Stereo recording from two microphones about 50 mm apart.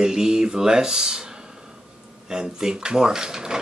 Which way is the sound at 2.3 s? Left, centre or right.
Centre.